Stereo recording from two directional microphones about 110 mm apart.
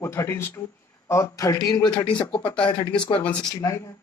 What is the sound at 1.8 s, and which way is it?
Speech, 10° left (ahead or behind).